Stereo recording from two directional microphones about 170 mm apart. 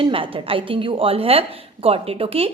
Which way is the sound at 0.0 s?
30° right (ahead or behind).